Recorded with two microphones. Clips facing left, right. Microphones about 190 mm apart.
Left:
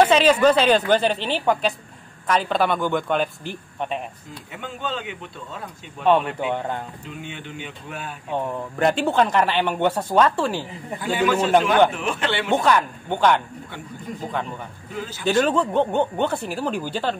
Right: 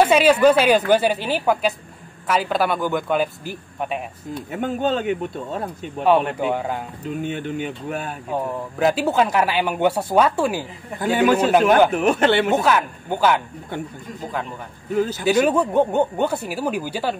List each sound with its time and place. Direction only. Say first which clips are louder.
0.0 s speech: right 1 dB; 10° right (ahead or behind)
4.5 s speech: right 9 dB; 45° right (ahead or behind)
6.4 s speech: right 2 dB; 5° right (ahead or behind)
7.1 s speech: right 9 dB; 45° right (ahead or behind)
8.3 s speech: even; 5° right (ahead or behind)
11.0 s speech: right 4 dB; 45° right (ahead or behind)
12.4 s speech: right 1 dB; 5° right (ahead or behind)
15.2 s speech: even; 10° right (ahead or behind)